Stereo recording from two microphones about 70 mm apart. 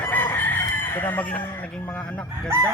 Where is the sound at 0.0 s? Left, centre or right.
Left.